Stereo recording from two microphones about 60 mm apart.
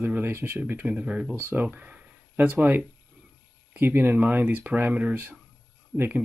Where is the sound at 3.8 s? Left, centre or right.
Right.